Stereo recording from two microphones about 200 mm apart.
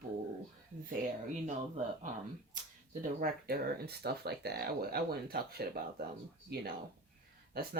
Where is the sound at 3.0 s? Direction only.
50° right (ahead or behind).